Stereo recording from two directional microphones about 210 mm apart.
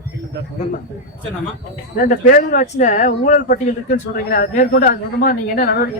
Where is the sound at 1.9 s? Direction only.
40° left (ahead or behind).